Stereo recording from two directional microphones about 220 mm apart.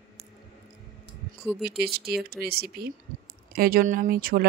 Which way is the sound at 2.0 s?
45° right (ahead or behind).